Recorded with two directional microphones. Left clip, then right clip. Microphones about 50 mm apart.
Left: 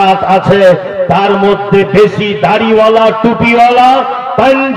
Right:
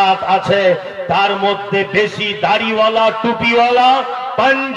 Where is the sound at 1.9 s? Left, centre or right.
Right.